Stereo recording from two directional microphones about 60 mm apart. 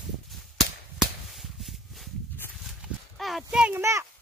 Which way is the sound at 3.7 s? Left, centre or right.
Right.